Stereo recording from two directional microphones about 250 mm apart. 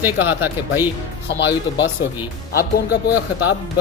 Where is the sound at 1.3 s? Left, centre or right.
Left.